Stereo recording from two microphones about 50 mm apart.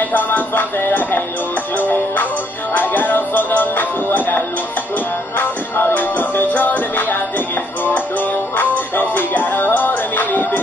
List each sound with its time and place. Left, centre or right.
0.1 s music: left